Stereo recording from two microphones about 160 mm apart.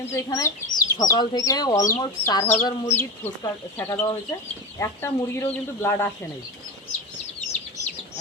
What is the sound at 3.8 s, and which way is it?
Speech, 15° left (ahead or behind).